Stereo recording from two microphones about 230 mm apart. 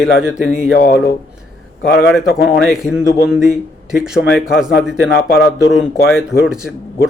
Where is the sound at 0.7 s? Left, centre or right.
Left.